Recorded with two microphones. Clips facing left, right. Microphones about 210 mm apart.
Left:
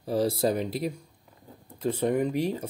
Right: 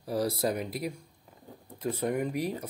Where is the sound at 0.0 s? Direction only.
25° left (ahead or behind).